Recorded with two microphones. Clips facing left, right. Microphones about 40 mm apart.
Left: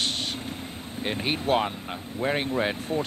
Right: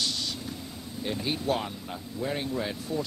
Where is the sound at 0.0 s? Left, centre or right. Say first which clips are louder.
Left 3 dB; left.